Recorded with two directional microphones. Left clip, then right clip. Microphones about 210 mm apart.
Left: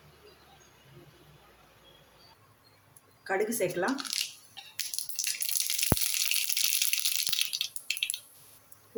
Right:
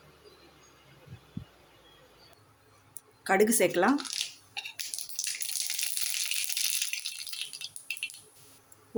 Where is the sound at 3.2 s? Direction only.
40° right (ahead or behind).